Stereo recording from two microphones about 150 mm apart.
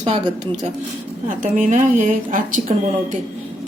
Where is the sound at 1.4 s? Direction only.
55° right (ahead or behind).